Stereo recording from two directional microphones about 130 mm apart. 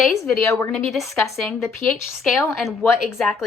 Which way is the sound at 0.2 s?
20° left (ahead or behind).